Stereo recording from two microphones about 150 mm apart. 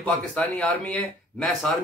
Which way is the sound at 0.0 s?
10° left (ahead or behind).